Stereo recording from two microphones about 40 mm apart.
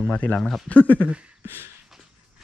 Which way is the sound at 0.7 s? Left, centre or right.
Left.